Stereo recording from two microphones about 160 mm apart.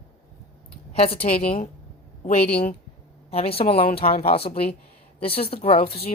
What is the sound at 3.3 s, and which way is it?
Speech, 40° left (ahead or behind).